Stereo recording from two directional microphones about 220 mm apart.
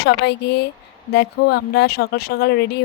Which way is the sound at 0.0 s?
50° left (ahead or behind).